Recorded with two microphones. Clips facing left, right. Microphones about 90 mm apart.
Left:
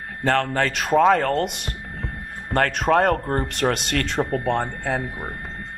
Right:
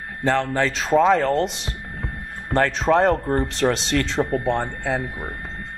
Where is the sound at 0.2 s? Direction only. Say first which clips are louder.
Even; 55° left (ahead or behind).